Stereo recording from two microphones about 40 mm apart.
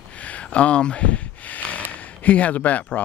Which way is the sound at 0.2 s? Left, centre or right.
Left.